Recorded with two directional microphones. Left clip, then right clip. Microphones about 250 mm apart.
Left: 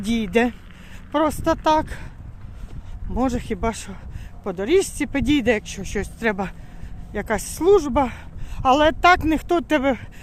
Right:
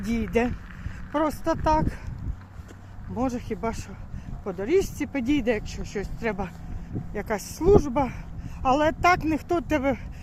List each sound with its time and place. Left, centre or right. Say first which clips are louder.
0.0 s speech: left 5 dB; left
3.2 s speech: left 5 dB; left